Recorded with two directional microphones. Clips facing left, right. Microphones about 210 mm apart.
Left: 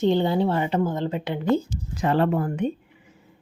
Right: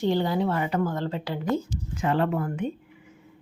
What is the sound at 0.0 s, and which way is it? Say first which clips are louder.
Speech: left 3 dB; 20° left (ahead or behind).